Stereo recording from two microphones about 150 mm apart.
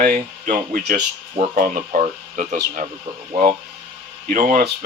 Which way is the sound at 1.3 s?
55° right (ahead or behind).